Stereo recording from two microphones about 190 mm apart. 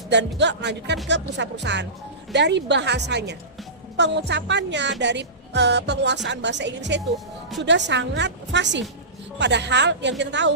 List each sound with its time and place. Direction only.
0.1 s a woman's voice: 65° right (ahead or behind)